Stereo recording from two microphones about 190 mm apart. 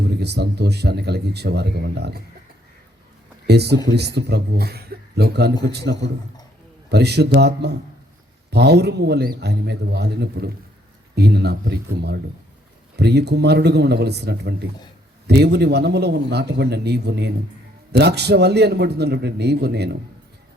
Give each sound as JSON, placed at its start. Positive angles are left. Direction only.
{"t": 0.2, "sound": "speech", "side_deg": -60}
{"t": 3.4, "sound": "speech", "side_deg": -60}
{"t": 6.9, "sound": "speech", "side_deg": -60}